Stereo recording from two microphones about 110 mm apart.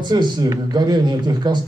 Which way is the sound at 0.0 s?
40° right (ahead or behind).